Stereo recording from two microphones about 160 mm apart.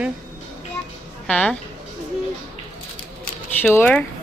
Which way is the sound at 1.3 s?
5° left (ahead or behind).